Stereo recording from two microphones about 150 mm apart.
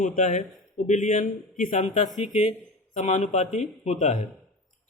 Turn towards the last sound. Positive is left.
turn(degrees=50)  # may be behind; listen again after turning